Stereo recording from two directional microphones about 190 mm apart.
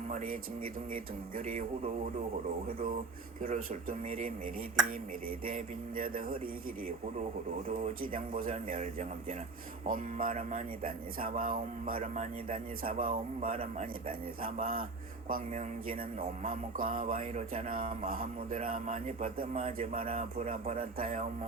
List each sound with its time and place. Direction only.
0.1 s music: 45° right (ahead or behind)
3.4 s music: 45° right (ahead or behind)
5.5 s music: 45° right (ahead or behind)
7.8 s music: 45° right (ahead or behind)